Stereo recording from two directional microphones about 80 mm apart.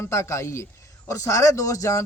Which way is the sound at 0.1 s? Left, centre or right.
Left.